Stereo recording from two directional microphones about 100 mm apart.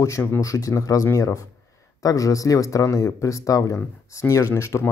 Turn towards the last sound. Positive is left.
turn(degrees=30)  # may be behind; listen again after turning